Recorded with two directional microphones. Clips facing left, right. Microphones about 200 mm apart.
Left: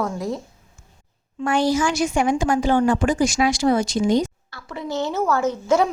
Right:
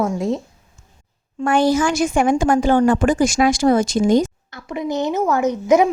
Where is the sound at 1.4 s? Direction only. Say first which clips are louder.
Right 3 dB; 50° right (ahead or behind).